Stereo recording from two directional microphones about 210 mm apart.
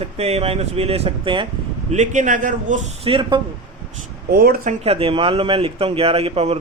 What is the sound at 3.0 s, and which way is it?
Speech, 25° right (ahead or behind).